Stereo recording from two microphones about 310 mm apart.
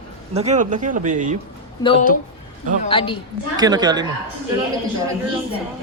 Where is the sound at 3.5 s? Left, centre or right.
Centre.